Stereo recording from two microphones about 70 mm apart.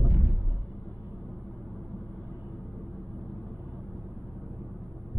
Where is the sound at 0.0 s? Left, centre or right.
Centre.